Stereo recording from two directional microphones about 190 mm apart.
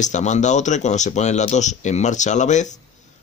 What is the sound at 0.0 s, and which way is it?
Speech, 40° left (ahead or behind).